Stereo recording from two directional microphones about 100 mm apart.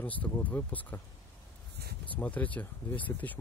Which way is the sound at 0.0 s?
15° left (ahead or behind).